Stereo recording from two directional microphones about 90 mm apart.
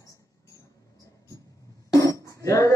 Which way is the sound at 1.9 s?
40° left (ahead or behind).